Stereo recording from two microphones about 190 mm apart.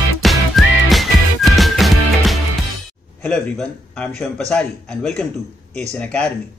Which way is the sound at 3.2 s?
5° left (ahead or behind).